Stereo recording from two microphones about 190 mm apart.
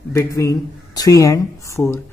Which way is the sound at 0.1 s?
15° left (ahead or behind).